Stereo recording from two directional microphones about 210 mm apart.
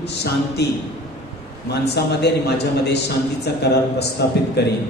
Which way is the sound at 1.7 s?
50° left (ahead or behind).